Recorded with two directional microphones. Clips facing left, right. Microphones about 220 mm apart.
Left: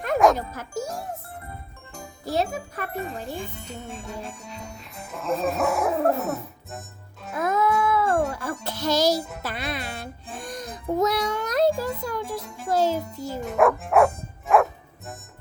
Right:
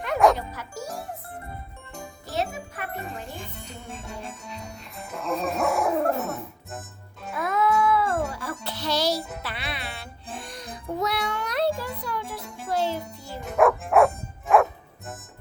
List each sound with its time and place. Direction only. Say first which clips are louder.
0.3 s speech: left 4 dB; 45° left (ahead or behind)
2.2 s jingle: left 4 dB; 35° left (ahead or behind)
3.0 s speech: left 5 dB; centre (ahead or behind)
7.3 s music: left 1 dB; 45° left (ahead or behind)
9.4 s speech: left 4 dB; 45° left (ahead or behind)
10.4 s music: left 5 dB; 45° left (ahead or behind)
12.4 s music: left 1 dB; centre (ahead or behind)
12.6 s music: left 4 dB; 40° left (ahead or behind)
13.4 s music: even; centre (ahead or behind)